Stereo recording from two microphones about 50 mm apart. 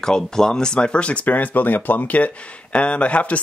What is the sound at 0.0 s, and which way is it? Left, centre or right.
Speech, centre.